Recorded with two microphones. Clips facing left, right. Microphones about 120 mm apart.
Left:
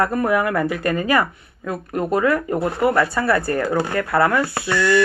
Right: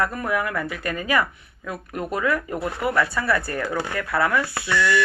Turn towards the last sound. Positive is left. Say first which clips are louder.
# left 4 dB
turn(degrees=40)  # may be behind; listen again after turning